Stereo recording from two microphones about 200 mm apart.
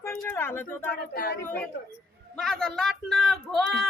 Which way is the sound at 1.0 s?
50° left (ahead or behind).